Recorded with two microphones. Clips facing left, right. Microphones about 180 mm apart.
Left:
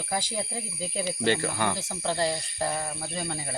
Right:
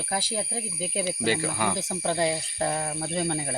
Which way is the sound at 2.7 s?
40° right (ahead or behind).